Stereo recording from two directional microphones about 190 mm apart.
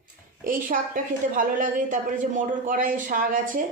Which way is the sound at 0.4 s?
45° right (ahead or behind).